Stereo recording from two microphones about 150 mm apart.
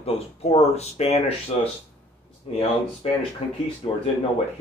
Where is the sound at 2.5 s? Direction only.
45° left (ahead or behind).